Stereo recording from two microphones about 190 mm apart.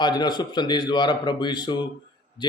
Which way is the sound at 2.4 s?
25° left (ahead or behind).